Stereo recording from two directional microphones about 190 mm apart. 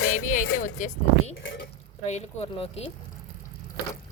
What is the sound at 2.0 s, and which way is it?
Speech, 35° left (ahead or behind).